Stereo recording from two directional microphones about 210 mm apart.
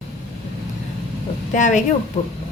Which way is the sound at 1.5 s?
35° left (ahead or behind).